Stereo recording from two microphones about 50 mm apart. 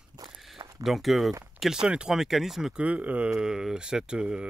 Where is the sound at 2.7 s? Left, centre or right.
Right.